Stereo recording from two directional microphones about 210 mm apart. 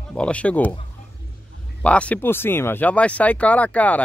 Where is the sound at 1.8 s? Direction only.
5° left (ahead or behind).